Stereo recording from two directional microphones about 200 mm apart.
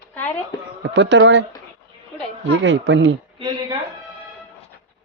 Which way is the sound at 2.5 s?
70° right (ahead or behind).